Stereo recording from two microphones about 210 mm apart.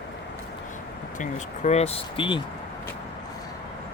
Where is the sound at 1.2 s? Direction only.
35° left (ahead or behind).